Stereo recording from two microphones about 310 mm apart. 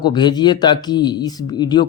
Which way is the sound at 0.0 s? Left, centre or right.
Centre.